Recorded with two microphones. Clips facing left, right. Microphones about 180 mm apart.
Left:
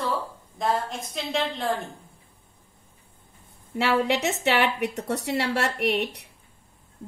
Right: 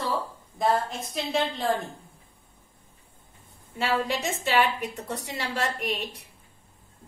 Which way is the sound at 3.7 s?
70° left (ahead or behind).